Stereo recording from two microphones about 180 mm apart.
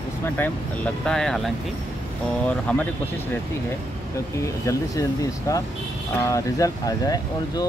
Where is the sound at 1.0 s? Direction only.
5° left (ahead or behind).